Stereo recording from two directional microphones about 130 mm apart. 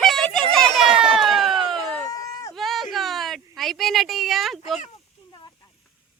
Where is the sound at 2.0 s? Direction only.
25° left (ahead or behind).